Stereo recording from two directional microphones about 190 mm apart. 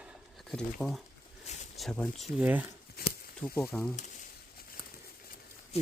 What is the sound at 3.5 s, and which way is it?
Speech, 5° left (ahead or behind).